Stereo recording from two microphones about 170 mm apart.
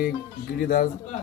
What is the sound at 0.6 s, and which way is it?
Speech, 55° left (ahead or behind).